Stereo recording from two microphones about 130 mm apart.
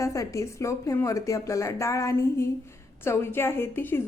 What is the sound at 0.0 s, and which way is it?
A woman's voice, 25° left (ahead or behind).